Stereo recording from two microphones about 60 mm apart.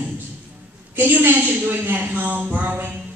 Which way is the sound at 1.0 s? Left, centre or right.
Right.